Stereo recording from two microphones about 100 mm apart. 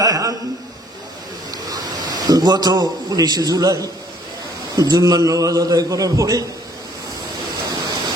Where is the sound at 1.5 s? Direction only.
40° right (ahead or behind).